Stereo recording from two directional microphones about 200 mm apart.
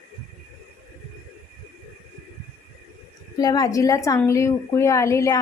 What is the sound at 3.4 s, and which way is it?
A woman's voice, 20° left (ahead or behind).